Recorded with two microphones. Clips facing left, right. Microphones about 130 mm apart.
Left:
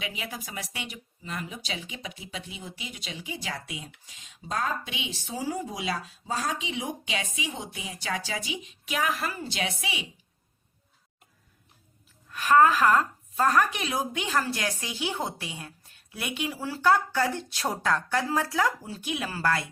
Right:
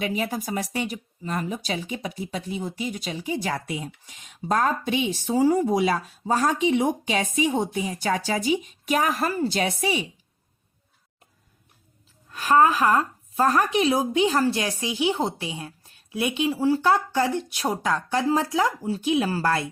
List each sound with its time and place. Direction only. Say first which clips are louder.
0.0 s speech: right 10 dB; 45° right (ahead or behind)
12.3 s speech: right 1 dB; 25° right (ahead or behind)